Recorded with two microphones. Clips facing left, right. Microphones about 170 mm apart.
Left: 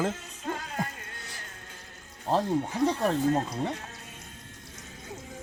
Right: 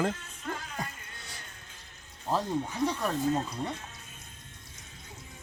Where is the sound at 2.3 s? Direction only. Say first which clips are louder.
Left 4 dB; 20° left (ahead or behind).